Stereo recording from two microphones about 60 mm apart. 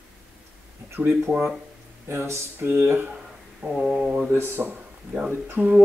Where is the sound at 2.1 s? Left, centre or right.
Right.